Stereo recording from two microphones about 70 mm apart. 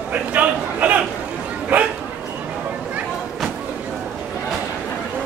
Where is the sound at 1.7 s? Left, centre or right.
Right.